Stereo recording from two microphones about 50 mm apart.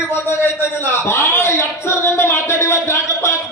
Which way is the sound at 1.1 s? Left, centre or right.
Left.